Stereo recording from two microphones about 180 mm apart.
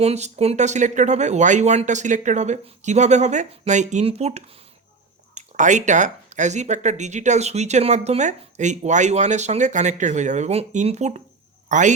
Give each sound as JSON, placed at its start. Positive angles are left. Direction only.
{"t": 0.0, "sound": "speech", "side_deg": -35}